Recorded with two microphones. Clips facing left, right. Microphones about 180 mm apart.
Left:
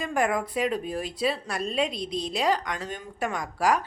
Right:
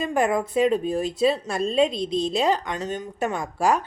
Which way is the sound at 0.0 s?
25° right (ahead or behind).